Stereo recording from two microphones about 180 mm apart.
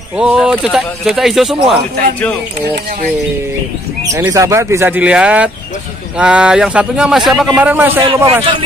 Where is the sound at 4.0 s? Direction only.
15° right (ahead or behind).